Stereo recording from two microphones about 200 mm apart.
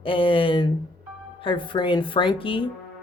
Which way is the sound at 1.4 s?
25° left (ahead or behind).